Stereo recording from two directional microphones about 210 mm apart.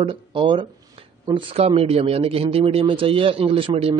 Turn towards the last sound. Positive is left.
turn(degrees=-25)  # may be behind; listen again after turning